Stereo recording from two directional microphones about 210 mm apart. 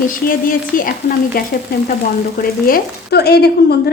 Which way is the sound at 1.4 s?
45° left (ahead or behind).